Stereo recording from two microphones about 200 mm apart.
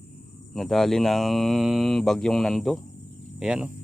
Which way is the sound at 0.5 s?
Centre (ahead or behind).